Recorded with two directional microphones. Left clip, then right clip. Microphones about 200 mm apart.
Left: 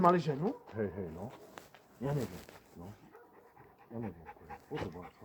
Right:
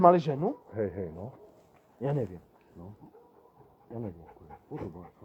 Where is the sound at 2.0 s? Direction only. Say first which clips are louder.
Right 6 dB; 20° right (ahead or behind).